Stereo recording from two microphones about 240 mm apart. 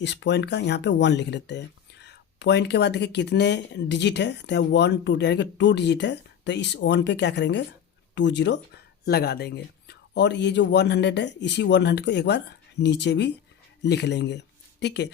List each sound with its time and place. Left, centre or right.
0.0 s speech: left